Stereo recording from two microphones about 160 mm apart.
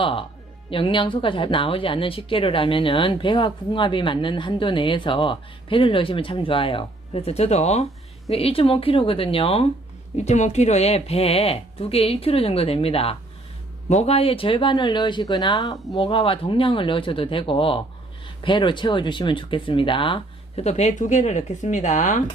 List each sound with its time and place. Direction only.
0.0 s speech: 35° left (ahead or behind); by 22.2 s 50° left (ahead or behind)